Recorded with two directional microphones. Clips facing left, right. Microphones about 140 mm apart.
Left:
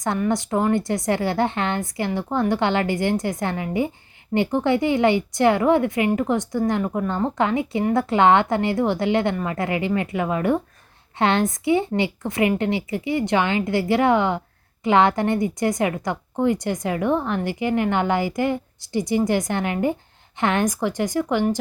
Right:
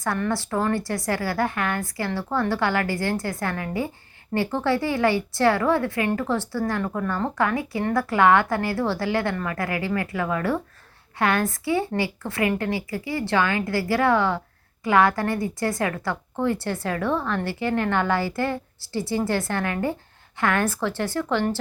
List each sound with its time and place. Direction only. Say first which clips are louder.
0.2 s speech: left 3 dB; 20° left (ahead or behind)